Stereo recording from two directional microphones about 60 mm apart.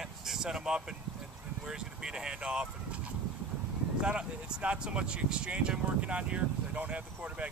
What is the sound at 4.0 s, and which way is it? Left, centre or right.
Speech, centre.